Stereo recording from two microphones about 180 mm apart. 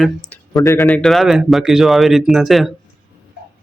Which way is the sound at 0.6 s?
20° left (ahead or behind).